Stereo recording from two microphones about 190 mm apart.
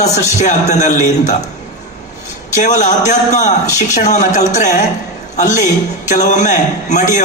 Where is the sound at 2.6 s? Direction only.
40° left (ahead or behind).